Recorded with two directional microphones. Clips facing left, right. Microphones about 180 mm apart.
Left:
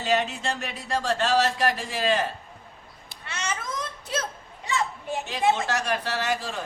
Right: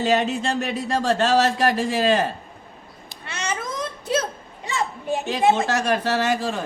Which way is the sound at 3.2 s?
30° right (ahead or behind).